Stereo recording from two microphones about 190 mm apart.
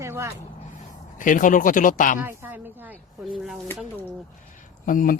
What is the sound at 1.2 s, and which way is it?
Speech, 45° left (ahead or behind).